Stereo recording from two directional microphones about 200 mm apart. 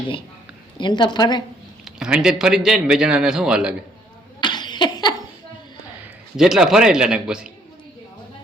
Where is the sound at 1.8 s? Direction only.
5° right (ahead or behind).